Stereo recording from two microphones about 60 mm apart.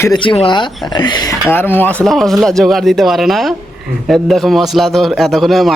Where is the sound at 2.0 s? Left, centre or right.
Centre.